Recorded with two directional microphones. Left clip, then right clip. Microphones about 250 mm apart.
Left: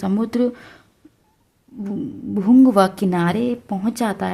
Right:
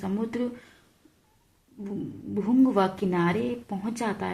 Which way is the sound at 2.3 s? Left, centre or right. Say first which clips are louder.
Left 9 dB; left.